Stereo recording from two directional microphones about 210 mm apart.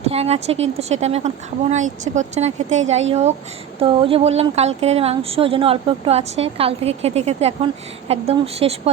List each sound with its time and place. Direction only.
0.1 s a woman's voice: 30° right (ahead or behind)